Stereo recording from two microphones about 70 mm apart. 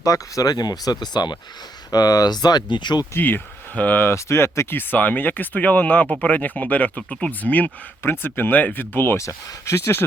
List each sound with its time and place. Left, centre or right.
0.0 s speech: left
1.9 s speech: left
3.2 s speech: left
4.1 s speech: left
9.1 s speech: left